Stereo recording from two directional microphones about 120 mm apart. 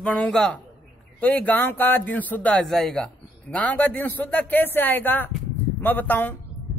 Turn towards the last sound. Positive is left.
turn(degrees=15)  # may be behind; listen again after turning